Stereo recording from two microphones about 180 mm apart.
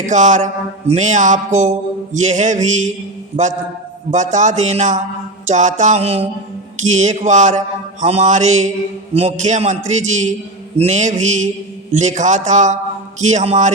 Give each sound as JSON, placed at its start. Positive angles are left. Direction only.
{"t": 0.0, "sound": "a man's voice", "side_deg": -45}